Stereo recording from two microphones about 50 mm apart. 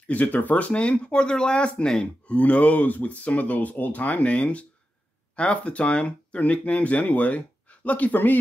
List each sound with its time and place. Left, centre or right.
0.0 s speech: left